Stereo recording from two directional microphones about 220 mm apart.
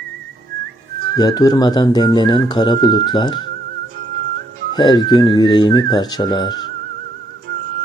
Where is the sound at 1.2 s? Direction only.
15° left (ahead or behind).